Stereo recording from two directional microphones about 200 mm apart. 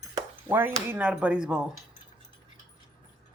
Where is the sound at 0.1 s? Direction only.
10° right (ahead or behind).